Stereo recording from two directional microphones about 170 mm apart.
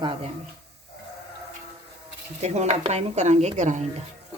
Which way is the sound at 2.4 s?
40° right (ahead or behind).